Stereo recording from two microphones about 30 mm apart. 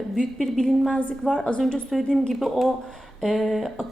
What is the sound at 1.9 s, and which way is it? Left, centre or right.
Speech, centre.